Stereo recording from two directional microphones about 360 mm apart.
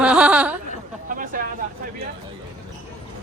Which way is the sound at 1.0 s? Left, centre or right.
Right.